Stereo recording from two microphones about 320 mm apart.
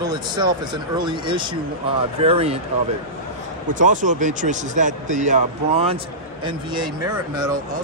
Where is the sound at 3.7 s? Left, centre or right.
Right.